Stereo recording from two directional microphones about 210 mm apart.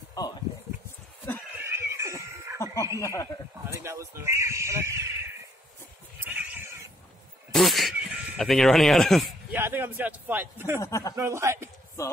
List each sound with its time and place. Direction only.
0.2 s speech: 15° left (ahead or behind)
1.6 s neigh: 15° right (ahead or behind)
2.6 s snicker: 15° left (ahead or behind)
3.0 s speech: 15° left (ahead or behind)
3.8 s a sound: 15° right (ahead or behind)
6.2 s cat: 10° right (ahead or behind)
7.5 s a sound: centre (ahead or behind)
9.6 s speech: 10° right (ahead or behind)
10.8 s speech: 15° left (ahead or behind)
11.1 s speech: 15° right (ahead or behind)